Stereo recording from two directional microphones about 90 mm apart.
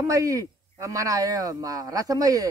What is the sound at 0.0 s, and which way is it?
A man's voice, 35° right (ahead or behind).